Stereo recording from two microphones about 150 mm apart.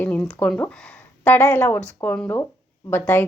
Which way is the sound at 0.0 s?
10° left (ahead or behind).